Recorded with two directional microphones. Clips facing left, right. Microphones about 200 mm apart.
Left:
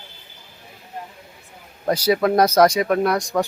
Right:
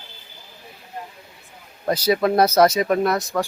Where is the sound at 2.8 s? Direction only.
5° left (ahead or behind).